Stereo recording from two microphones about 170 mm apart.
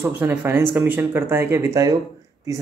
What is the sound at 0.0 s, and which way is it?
Speech, 10° right (ahead or behind).